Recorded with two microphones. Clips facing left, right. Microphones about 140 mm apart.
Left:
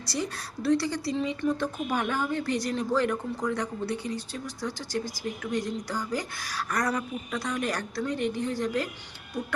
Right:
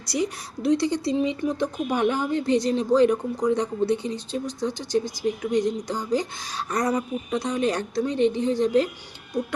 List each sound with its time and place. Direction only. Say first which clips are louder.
0.0 s a woman's voice: right 6 dB; 15° right (ahead or behind)